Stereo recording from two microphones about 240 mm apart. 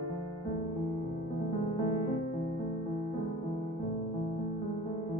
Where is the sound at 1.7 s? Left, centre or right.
Centre.